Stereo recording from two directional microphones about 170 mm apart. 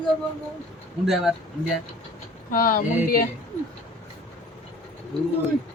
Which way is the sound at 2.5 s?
55° left (ahead or behind).